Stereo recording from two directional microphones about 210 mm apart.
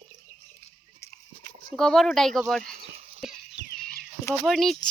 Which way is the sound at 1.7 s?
5° left (ahead or behind).